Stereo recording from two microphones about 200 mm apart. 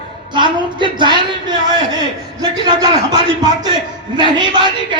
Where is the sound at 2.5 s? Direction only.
20° right (ahead or behind).